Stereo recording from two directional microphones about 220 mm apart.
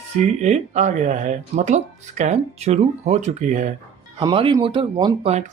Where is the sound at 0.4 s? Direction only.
30° right (ahead or behind).